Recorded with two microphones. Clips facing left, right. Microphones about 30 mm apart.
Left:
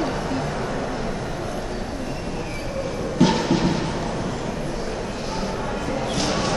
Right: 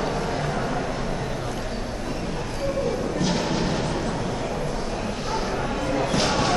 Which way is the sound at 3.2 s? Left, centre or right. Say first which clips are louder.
Left 10 dB; left.